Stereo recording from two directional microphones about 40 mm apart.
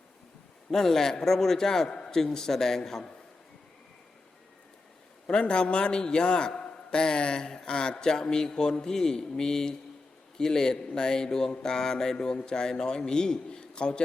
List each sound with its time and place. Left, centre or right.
0.7 s speech: centre
5.2 s a man's voice: left